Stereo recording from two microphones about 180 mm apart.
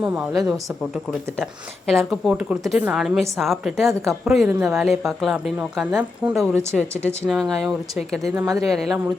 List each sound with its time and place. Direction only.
0.0 s a woman's voice: 10° right (ahead or behind)
1.9 s a woman's voice: centre (ahead or behind)
7.3 s a woman's voice: centre (ahead or behind)
8.3 s speech: 20° right (ahead or behind)
8.6 s a woman's voice: centre (ahead or behind)